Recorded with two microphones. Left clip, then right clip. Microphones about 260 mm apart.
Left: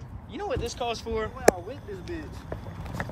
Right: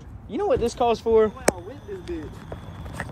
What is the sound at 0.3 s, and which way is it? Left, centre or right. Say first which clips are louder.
Speech: right 9 dB; centre.